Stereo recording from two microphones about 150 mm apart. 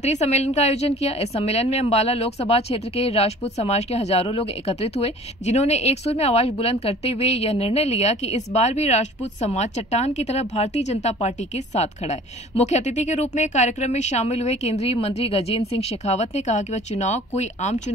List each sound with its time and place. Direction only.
0.0 s a woman's voice: 50° left (ahead or behind)